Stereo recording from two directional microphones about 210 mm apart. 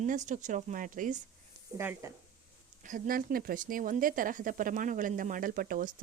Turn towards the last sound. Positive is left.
turn(degrees=-40)  # may be behind; listen again after turning